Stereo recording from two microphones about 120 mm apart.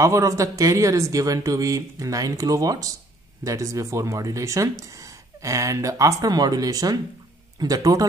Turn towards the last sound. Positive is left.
turn(degrees=-30)  # may be behind; listen again after turning